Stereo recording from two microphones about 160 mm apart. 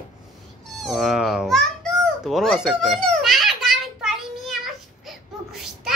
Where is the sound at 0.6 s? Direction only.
Centre (ahead or behind).